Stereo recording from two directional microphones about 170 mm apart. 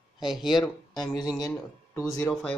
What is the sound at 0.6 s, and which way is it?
Speech, 25° left (ahead or behind).